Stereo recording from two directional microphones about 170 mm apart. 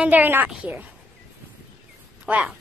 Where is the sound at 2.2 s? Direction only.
10° right (ahead or behind).